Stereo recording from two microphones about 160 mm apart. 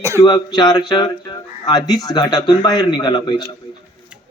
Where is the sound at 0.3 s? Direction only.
25° left (ahead or behind).